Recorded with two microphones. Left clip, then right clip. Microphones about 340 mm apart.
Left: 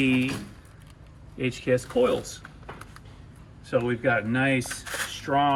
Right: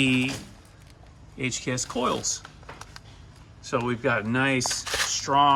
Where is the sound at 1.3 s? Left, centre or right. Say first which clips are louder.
Left 4 dB; centre.